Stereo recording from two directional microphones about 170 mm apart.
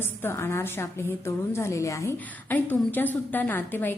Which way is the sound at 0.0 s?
15° left (ahead or behind).